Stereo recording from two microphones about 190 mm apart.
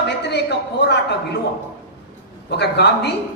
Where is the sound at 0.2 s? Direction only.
60° left (ahead or behind).